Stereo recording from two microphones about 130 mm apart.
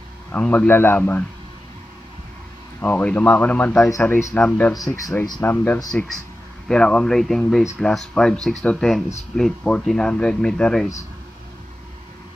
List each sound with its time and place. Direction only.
0.3 s speech: 10° left (ahead or behind)
2.8 s speech: 15° left (ahead or behind)
4.7 s speech: 25° left (ahead or behind)
5.4 s speech: 15° left (ahead or behind)
5.9 s speech: 5° left (ahead or behind)